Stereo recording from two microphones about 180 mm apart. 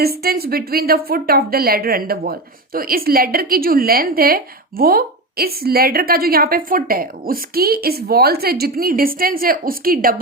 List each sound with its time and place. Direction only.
0.0 s a woman's voice: 55° right (ahead or behind)